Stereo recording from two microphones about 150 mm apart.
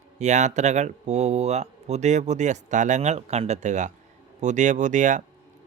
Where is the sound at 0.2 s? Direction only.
50° right (ahead or behind).